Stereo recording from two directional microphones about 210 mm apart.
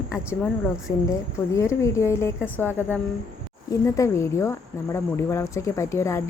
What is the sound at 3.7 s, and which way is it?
Speech, 15° left (ahead or behind).